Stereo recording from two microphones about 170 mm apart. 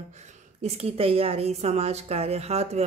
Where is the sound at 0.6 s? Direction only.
40° right (ahead or behind).